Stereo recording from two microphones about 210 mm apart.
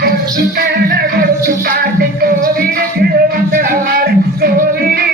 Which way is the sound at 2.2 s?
45° right (ahead or behind).